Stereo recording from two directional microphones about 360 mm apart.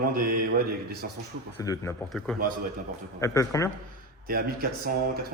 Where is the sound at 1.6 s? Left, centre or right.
Centre.